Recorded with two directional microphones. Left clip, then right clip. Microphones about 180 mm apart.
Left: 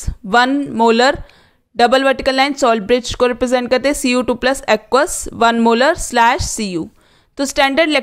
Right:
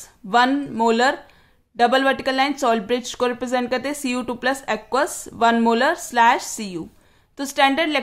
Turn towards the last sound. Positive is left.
turn(degrees=40)  # may be behind; listen again after turning